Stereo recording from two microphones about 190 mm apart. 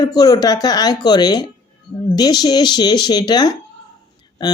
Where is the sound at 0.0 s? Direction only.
20° left (ahead or behind).